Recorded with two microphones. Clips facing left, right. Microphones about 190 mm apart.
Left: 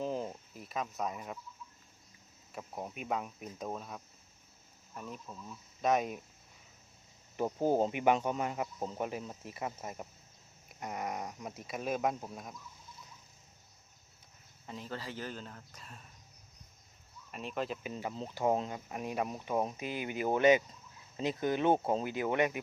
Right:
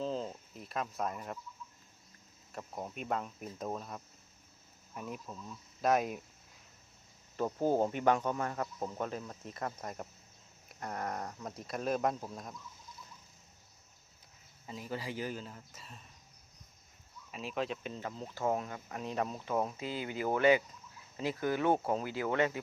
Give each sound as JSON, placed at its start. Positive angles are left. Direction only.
{"t": 0.0, "sound": "a sound", "side_deg": 15}
{"t": 0.5, "sound": "speech", "side_deg": 0}
{"t": 2.5, "sound": "speech", "side_deg": 5}
{"t": 7.3, "sound": "speech", "side_deg": 15}
{"t": 14.7, "sound": "speech", "side_deg": -10}
{"t": 17.3, "sound": "speech", "side_deg": 0}
{"t": 17.9, "sound": "speech", "side_deg": 20}